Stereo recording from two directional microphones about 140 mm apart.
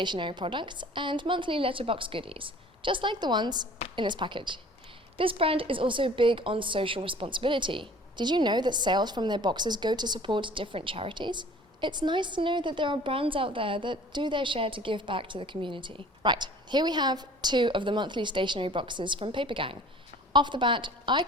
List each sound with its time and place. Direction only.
0.0 s a woman's voice: 35° right (ahead or behind)